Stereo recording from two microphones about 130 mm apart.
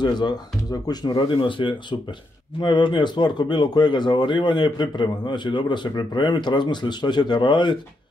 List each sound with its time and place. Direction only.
0.0 s speech: 35° left (ahead or behind)